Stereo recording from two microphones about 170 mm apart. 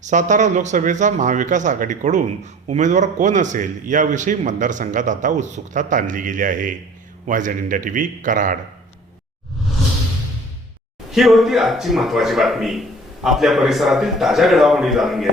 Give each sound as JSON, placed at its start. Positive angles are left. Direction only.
{"t": 0.0, "sound": "speech", "side_deg": -45}
{"t": 11.1, "sound": "a man's voice", "side_deg": 0}